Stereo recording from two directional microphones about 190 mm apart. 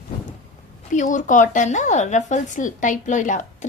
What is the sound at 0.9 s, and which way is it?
Speech, 40° left (ahead or behind).